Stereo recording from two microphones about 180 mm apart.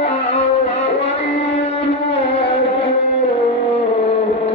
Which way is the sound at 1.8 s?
75° left (ahead or behind).